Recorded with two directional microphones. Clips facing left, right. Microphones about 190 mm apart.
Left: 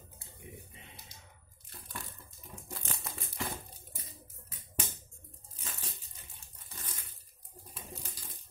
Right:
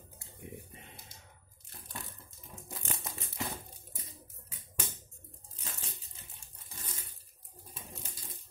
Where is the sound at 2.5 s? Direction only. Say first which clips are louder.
Right 1 dB; 20° right (ahead or behind).